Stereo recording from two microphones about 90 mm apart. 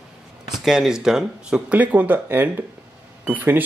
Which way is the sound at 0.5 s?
5° right (ahead or behind).